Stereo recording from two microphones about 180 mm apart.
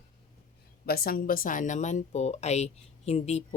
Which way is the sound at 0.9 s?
55° left (ahead or behind).